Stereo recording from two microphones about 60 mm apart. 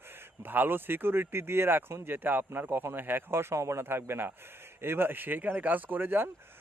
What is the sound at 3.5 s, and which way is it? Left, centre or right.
Speech, right.